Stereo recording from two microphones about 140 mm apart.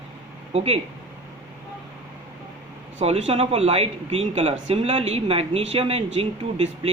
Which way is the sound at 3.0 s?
45° right (ahead or behind).